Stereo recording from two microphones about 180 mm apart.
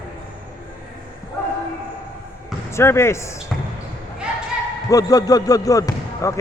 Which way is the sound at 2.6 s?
15° left (ahead or behind).